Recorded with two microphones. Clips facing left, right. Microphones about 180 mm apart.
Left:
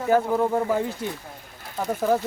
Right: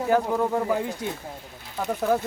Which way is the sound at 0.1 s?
5° left (ahead or behind).